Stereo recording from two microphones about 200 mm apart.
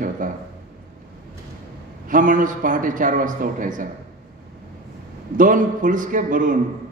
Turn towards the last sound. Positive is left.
turn(degrees=-40)  # may be behind; listen again after turning